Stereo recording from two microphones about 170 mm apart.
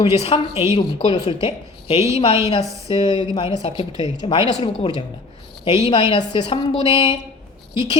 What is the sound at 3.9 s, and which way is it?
Speech, 20° right (ahead or behind).